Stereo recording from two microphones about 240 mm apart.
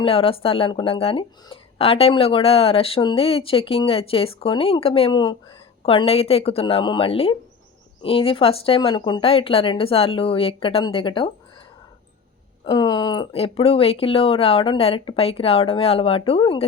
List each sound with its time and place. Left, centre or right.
0.0 s speech: left
12.6 s speech: centre